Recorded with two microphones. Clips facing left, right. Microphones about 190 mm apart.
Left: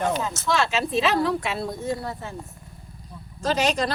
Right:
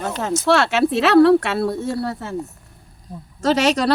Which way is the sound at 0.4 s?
75° right (ahead or behind).